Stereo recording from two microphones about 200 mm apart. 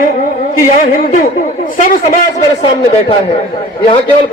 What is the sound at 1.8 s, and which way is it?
Speech, 40° left (ahead or behind).